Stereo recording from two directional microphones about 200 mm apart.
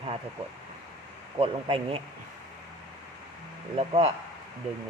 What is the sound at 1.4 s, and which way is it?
Speech, 25° right (ahead or behind).